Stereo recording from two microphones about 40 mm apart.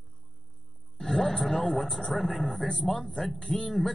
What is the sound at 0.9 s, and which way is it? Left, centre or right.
Speech, centre.